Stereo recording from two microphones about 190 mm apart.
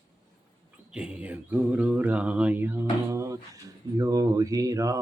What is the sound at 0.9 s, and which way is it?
Mantra, 5° right (ahead or behind).